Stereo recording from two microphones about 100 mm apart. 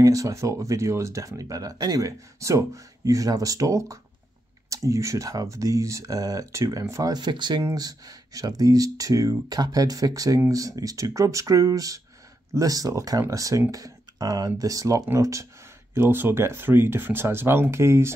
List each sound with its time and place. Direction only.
0.0 s speech: 35° right (ahead or behind); by 7.6 s 50° right (ahead or behind)
7.6 s speech: 35° right (ahead or behind)